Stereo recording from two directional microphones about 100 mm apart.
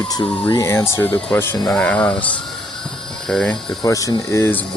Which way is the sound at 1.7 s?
10° left (ahead or behind).